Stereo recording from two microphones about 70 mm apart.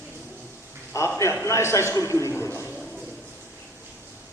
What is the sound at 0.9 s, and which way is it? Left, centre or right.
A man's voice, left.